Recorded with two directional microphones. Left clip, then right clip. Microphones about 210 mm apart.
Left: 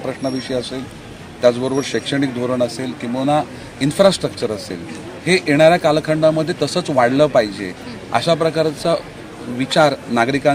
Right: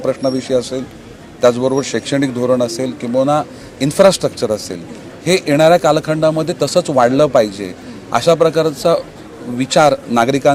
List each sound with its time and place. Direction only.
0.1 s a man's voice: 50° right (ahead or behind)